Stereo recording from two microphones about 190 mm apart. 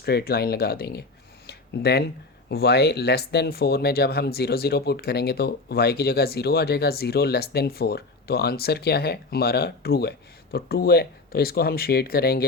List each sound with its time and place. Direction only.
0.0 s speech: 55° left (ahead or behind)
1.5 s a sound: 60° left (ahead or behind)
2.5 s speech: 60° left (ahead or behind)